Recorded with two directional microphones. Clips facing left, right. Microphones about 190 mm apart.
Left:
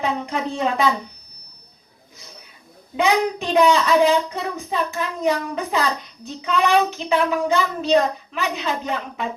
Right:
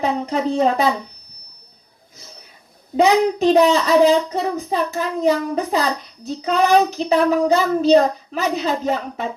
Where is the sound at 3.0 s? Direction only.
40° right (ahead or behind).